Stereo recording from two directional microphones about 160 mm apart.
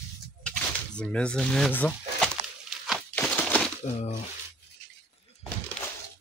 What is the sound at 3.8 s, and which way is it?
Speech, 45° left (ahead or behind).